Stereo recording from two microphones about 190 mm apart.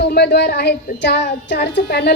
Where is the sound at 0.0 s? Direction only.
60° left (ahead or behind).